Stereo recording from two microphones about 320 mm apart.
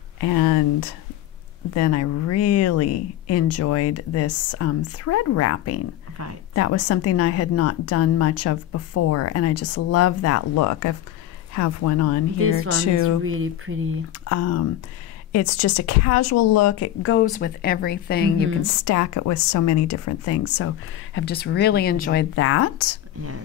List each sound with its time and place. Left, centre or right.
1.7 s a woman's voice: left
12.4 s speech: right
14.2 s a woman's voice: left
17.2 s speech: left
18.6 s a woman's voice: left